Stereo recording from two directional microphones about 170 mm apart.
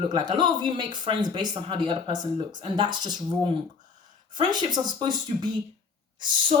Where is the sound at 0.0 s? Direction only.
25° right (ahead or behind).